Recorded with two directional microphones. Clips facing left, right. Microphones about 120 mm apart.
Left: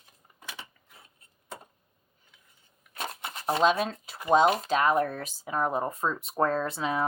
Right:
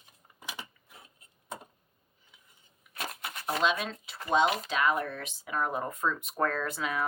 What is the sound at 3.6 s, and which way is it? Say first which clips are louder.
Speech: left 5 dB; 40° left (ahead or behind).